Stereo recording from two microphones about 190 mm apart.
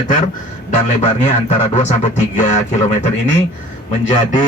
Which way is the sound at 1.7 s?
40° left (ahead or behind).